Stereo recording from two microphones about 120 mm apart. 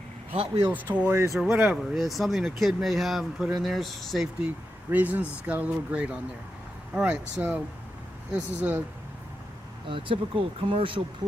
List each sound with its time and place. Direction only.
0.3 s speech: 45° right (ahead or behind)
0.7 s speech: 15° right (ahead or behind)
1.4 s speech: 5° right (ahead or behind)
4.9 s speech: 15° right (ahead or behind)
10.7 s speech: 45° right (ahead or behind)